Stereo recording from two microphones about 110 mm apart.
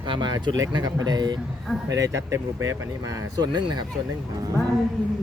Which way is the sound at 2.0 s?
30° right (ahead or behind).